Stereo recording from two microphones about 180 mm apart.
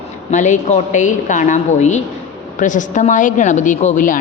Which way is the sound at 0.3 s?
40° left (ahead or behind).